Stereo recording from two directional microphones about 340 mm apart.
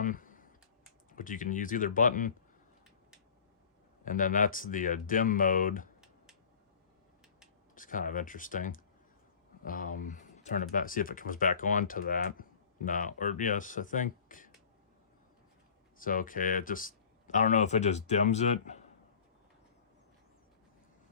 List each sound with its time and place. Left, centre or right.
0.0 s computer keyboard: left
1.1 s speech: left
4.0 s speech: left
7.8 s speech: left
16.0 s speech: left